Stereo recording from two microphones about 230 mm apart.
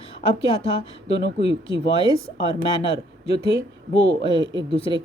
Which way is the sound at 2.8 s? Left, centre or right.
Left.